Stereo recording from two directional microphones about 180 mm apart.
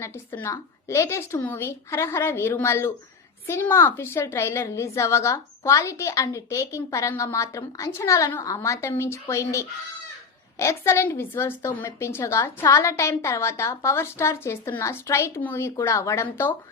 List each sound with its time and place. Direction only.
0.0 s a woman's voice: 15° left (ahead or behind)